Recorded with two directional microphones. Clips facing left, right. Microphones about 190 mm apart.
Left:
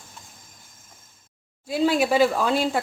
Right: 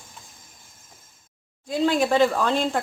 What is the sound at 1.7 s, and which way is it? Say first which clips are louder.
Speech: even; 5° left (ahead or behind).